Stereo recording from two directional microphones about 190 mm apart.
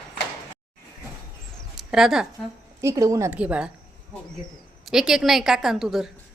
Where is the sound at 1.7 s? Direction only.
Centre (ahead or behind).